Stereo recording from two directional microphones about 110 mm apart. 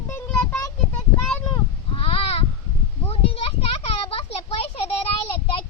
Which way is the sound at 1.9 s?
60° left (ahead or behind).